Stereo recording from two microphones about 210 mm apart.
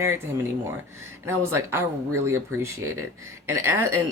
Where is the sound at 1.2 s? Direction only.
10° right (ahead or behind).